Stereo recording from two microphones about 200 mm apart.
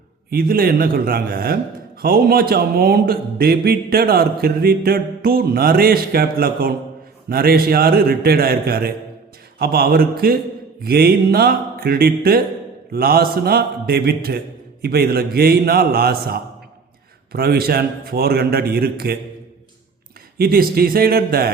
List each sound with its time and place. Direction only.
0.3 s speech: 50° right (ahead or behind)
20.4 s speech: 50° right (ahead or behind)